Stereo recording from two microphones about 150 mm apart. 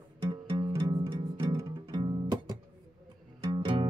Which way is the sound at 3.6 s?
35° right (ahead or behind).